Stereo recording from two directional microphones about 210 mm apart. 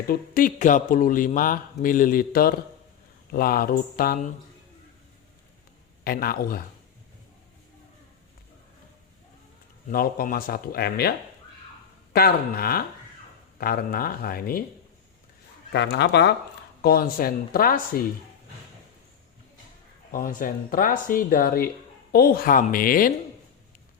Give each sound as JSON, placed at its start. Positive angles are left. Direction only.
{"t": 0.1, "sound": "speech", "side_deg": 40}
{"t": 6.1, "sound": "speech", "side_deg": 45}
{"t": 9.9, "sound": "speech", "side_deg": 45}
{"t": 12.1, "sound": "speech", "side_deg": 45}
{"t": 15.7, "sound": "speech", "side_deg": 55}
{"t": 20.1, "sound": "speech", "side_deg": 40}